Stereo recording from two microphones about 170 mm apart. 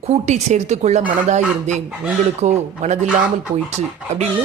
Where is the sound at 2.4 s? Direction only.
40° right (ahead or behind).